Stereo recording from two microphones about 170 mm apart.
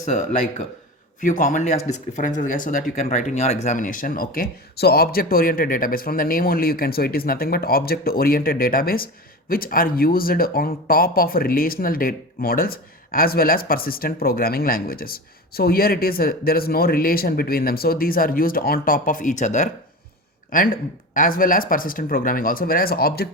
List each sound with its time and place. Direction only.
0.0 s a man's voice: 45° left (ahead or behind); by 23.3 s 65° left (ahead or behind)